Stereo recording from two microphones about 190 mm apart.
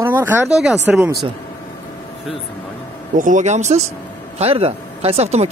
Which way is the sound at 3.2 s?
40° right (ahead or behind).